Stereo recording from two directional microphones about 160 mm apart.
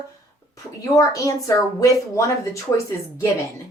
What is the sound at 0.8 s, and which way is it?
Speech, 20° left (ahead or behind).